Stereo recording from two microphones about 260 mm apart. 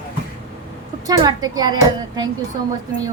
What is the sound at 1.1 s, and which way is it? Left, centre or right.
Speech, centre.